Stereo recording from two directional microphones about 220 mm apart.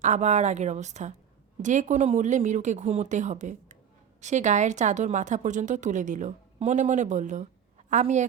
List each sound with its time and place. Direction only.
0.0 s a woman's voice: 30° right (ahead or behind)